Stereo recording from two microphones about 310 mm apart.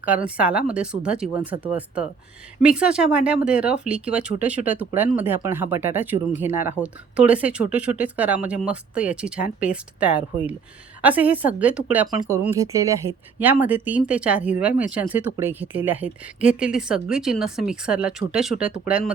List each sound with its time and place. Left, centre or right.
0.3 s speech: centre